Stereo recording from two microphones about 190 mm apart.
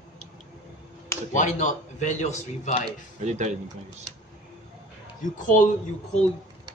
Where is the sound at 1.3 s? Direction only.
40° left (ahead or behind).